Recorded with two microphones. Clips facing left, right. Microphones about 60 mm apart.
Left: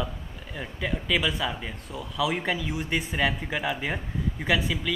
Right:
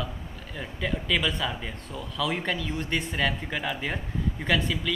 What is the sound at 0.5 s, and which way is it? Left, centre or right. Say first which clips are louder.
Speech: even; centre.